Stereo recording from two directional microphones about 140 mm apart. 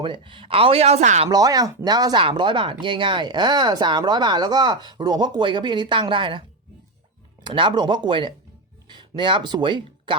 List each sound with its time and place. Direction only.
0.0 s speech: 35° right (ahead or behind); by 1.3 s 50° right (ahead or behind)
1.3 s speech: 25° right (ahead or behind)
7.4 s speech: 35° right (ahead or behind)